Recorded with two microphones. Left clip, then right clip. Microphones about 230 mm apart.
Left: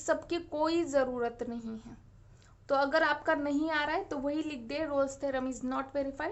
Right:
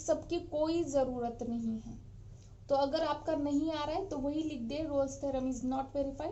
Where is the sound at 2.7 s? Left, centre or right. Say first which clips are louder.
Left 3 dB; left.